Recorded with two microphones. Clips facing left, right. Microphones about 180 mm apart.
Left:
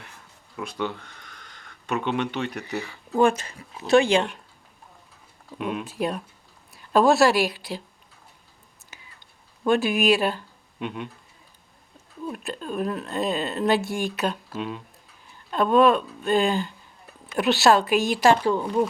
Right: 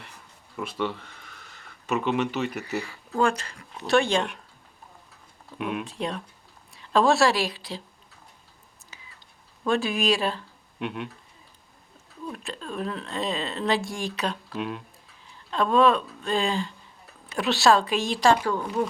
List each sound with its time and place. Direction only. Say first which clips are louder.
0.6 s speech: even; 5° right (ahead or behind)
5.5 s a woman's voice: left 2 dB; centre (ahead or behind)
9.6 s speech: left 4 dB; centre (ahead or behind)
12.2 s speech: left 4 dB; 5° left (ahead or behind)
18.4 s a woman's voice: left 4 dB; 20° left (ahead or behind)